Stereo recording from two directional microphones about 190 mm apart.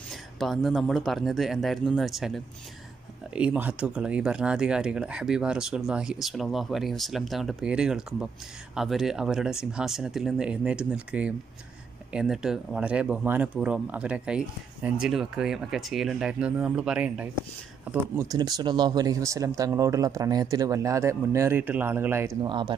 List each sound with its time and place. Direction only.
0.1 s speech: centre (ahead or behind)
18.1 s speech: 20° right (ahead or behind)
22.4 s speech: 25° right (ahead or behind)